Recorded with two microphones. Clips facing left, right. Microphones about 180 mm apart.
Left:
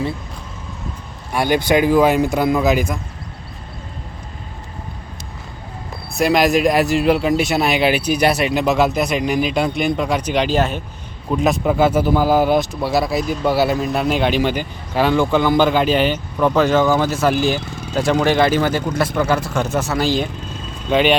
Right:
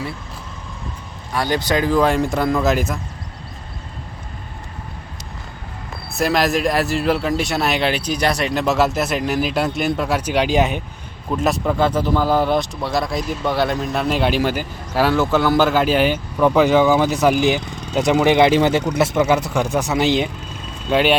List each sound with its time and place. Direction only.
1.3 s speech: 15° left (ahead or behind); by 3.0 s centre (ahead or behind)
6.1 s speech: centre (ahead or behind)
11.3 s speech: centre (ahead or behind)
16.8 s speech: 5° right (ahead or behind)
17.2 s speech: 15° right (ahead or behind)
20.9 s speech: 5° right (ahead or behind)